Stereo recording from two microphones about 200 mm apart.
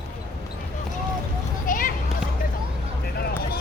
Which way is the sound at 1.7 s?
45° left (ahead or behind).